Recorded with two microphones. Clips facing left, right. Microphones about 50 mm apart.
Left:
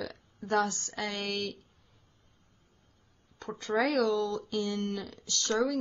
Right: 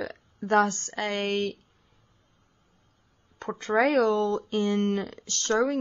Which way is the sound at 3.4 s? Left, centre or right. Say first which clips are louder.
Right 5 dB; right.